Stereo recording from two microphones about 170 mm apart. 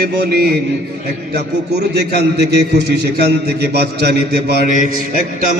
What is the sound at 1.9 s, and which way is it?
A man's voice, 75° right (ahead or behind).